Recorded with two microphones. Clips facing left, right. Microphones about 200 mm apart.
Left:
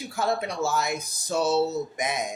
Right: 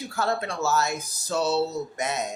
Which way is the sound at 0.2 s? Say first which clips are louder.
Left 1 dB; 15° left (ahead or behind).